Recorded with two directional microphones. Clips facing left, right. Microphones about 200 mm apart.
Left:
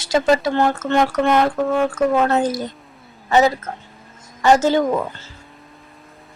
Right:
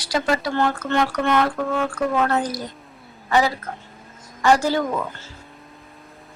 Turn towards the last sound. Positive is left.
turn(degrees=20)  # may be behind; listen again after turning